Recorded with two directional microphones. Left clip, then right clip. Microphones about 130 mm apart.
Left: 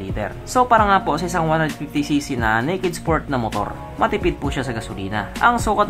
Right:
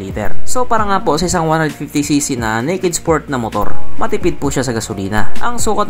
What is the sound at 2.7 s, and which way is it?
Speech, 40° right (ahead or behind).